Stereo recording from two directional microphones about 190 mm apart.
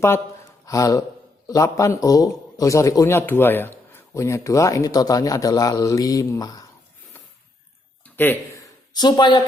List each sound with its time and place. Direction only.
0.6 s a man's voice: 15° left (ahead or behind)
8.1 s speech: 10° left (ahead or behind)
8.9 s speech: 20° left (ahead or behind)